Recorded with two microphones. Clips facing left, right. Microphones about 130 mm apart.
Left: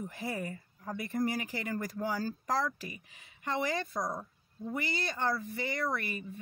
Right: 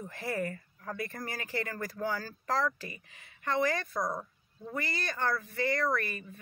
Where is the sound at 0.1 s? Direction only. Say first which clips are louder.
Right 3 dB; 15° left (ahead or behind).